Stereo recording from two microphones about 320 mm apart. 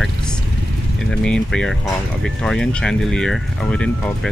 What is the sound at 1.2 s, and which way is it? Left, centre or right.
Speech, centre.